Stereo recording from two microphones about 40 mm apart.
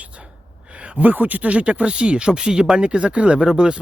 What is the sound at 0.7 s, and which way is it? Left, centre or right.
Speech, right.